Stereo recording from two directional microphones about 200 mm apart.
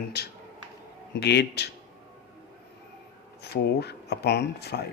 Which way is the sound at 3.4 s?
55° left (ahead or behind).